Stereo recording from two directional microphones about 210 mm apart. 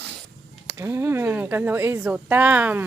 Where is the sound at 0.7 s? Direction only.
15° right (ahead or behind).